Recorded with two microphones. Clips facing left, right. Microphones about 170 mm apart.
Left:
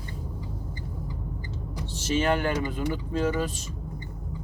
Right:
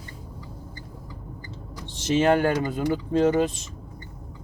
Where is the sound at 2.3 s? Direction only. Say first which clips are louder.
Right 5 dB; 50° right (ahead or behind).